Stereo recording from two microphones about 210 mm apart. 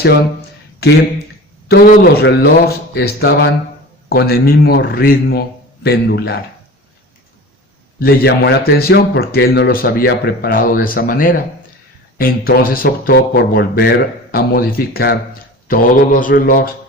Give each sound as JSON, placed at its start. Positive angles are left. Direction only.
{"t": 0.8, "sound": "a man's voice", "side_deg": 50}
{"t": 7.9, "sound": "a man's voice", "side_deg": 50}
{"t": 15.6, "sound": "mantra", "side_deg": 40}